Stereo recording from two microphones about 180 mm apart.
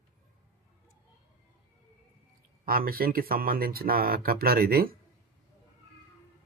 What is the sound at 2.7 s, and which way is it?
Speech, 55° right (ahead or behind).